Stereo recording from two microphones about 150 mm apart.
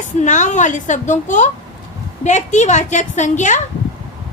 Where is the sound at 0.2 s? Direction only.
55° left (ahead or behind).